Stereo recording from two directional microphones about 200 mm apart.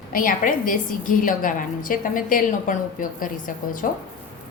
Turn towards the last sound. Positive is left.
turn(degrees=45)  # may be behind; listen again after turning